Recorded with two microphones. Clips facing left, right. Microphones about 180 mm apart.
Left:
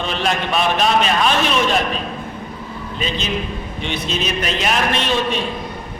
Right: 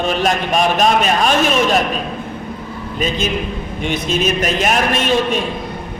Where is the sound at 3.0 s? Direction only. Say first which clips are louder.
Right 4 dB; 45° right (ahead or behind).